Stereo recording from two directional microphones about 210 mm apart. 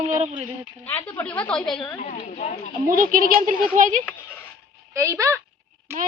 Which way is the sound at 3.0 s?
40° right (ahead or behind).